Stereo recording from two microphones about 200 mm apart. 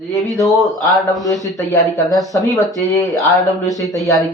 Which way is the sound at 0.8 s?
15° left (ahead or behind).